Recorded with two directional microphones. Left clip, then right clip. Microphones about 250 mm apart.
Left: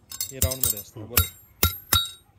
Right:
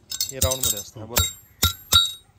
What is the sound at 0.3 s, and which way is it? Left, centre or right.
Speech, centre.